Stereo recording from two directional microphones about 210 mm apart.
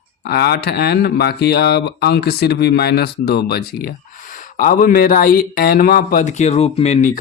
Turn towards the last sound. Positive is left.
turn(degrees=30)  # may be behind; listen again after turning